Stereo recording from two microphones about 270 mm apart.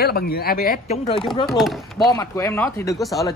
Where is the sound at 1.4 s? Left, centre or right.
Centre.